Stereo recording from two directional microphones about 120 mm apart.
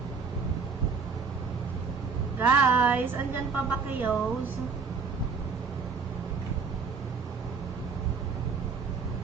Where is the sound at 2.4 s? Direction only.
15° right (ahead or behind).